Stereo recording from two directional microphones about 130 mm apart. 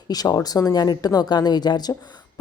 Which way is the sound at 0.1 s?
30° left (ahead or behind).